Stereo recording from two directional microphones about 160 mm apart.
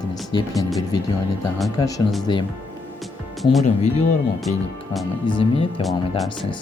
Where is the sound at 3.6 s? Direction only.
50° left (ahead or behind).